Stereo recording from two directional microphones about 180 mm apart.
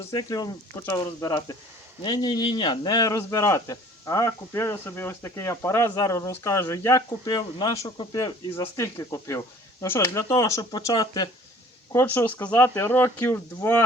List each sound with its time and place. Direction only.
0.0 s a man's voice: 20° left (ahead or behind)